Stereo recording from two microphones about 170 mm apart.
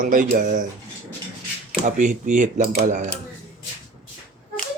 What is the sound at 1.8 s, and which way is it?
Speech, 45° right (ahead or behind).